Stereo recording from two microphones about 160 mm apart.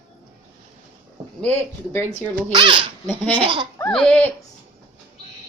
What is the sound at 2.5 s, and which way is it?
Speech, 30° right (ahead or behind).